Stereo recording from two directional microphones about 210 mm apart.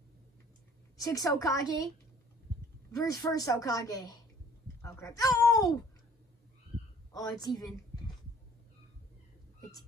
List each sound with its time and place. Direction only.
1.0 s a woman's voice: 15° left (ahead or behind)
3.0 s a woman's voice: 15° left (ahead or behind)
7.1 s a woman's voice: 15° left (ahead or behind)